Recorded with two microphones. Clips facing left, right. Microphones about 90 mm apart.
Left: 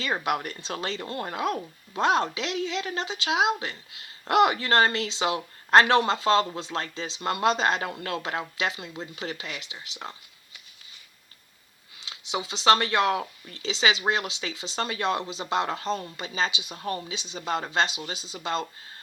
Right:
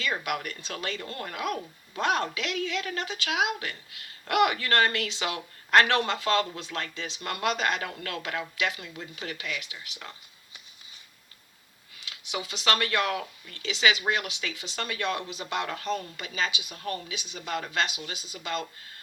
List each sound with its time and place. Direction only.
0.0 s speech: 30° left (ahead or behind)
11.9 s speech: 25° left (ahead or behind)